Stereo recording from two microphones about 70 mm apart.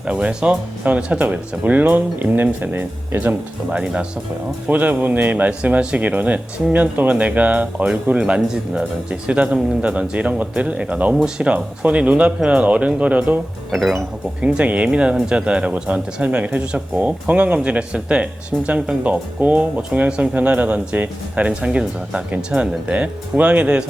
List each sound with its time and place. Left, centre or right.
0.0 s speech: centre
13.7 s speech: centre
14.4 s speech: centre